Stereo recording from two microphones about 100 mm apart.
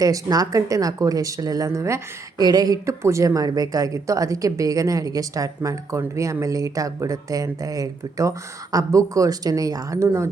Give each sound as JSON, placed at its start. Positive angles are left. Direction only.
{"t": 0.0, "sound": "speech", "side_deg": -35}
{"t": 2.4, "sound": "speech", "side_deg": -40}
{"t": 3.0, "sound": "speech", "side_deg": -30}